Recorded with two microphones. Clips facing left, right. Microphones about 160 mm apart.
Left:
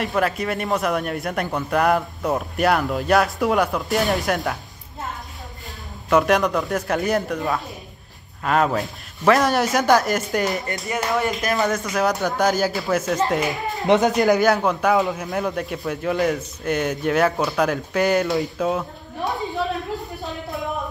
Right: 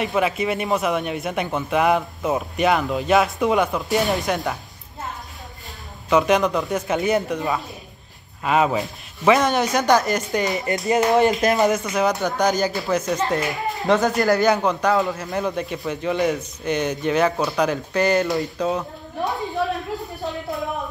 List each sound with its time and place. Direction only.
0.0 s a man's voice: 5° right (ahead or behind)
6.0 s a man's voice: centre (ahead or behind)
10.6 s speech: 20° right (ahead or behind)
11.7 s a man's voice: centre (ahead or behind)
13.8 s speech: 20° left (ahead or behind)
14.4 s a man's voice: centre (ahead or behind)